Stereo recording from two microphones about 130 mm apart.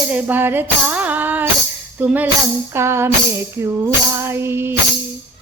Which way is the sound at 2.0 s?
15° right (ahead or behind).